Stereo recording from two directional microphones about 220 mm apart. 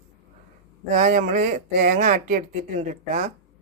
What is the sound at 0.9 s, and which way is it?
Speech, 35° right (ahead or behind).